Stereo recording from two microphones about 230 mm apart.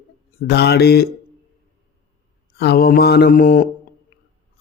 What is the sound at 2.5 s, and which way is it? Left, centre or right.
Speech, left.